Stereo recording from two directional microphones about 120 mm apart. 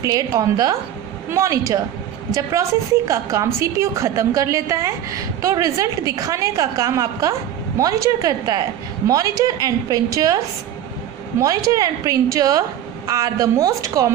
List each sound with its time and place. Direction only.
0.0 s a woman's voice: 30° right (ahead or behind)
3.1 s a woman's voice: 25° right (ahead or behind)